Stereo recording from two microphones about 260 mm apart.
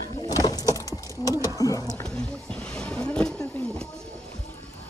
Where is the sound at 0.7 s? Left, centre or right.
Centre.